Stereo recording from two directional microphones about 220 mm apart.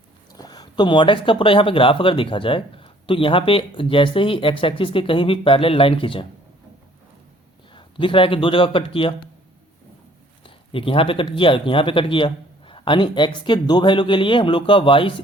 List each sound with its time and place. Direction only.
0.3 s speech: 15° left (ahead or behind)
7.7 s speech: 20° left (ahead or behind)
10.4 s speech: 25° left (ahead or behind)